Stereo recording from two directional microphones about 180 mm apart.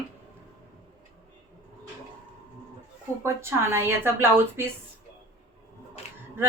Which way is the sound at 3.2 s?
15° right (ahead or behind).